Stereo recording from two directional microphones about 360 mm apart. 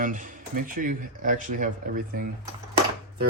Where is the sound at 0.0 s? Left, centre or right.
Right.